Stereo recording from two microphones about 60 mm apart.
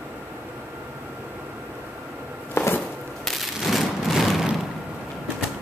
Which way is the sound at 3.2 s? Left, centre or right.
Centre.